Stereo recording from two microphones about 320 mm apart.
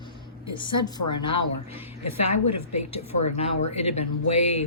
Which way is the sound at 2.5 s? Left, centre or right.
Left.